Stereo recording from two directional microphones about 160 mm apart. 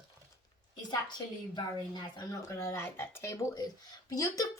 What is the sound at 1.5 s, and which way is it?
Speech, 25° left (ahead or behind).